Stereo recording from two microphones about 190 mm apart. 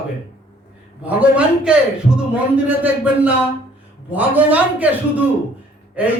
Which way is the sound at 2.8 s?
5° right (ahead or behind).